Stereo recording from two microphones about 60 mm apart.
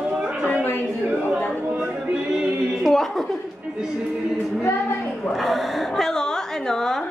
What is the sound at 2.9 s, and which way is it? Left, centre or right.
Speech, centre.